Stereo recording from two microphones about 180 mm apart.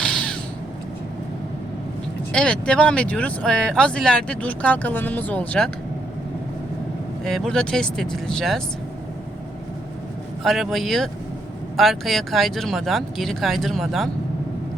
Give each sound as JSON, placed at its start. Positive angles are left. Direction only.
{"t": 2.3, "sound": "speech", "side_deg": 5}
{"t": 7.3, "sound": "speech", "side_deg": 5}
{"t": 10.4, "sound": "speech", "side_deg": 0}